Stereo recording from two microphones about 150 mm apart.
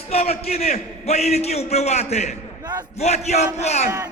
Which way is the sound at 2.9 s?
45° left (ahead or behind).